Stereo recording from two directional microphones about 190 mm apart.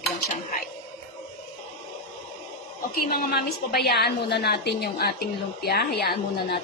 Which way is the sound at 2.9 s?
50° left (ahead or behind).